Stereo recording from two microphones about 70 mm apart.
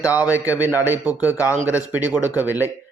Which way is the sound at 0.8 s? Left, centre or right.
Right.